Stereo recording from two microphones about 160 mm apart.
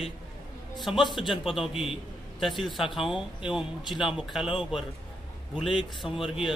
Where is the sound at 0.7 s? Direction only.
Centre (ahead or behind).